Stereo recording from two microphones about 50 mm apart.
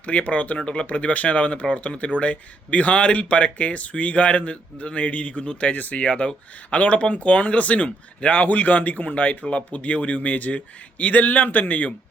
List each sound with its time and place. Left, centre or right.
0.0 s speech: left